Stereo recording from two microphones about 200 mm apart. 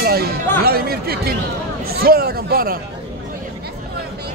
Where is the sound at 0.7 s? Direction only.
50° right (ahead or behind).